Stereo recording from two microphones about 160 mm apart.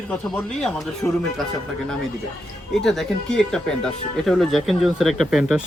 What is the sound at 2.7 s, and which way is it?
Speech, centre (ahead or behind).